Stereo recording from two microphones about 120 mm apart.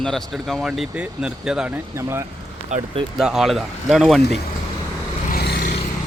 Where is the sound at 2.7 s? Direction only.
80° right.